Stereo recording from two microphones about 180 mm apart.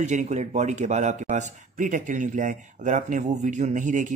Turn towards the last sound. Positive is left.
turn(degrees=-45)  # may be behind; listen again after turning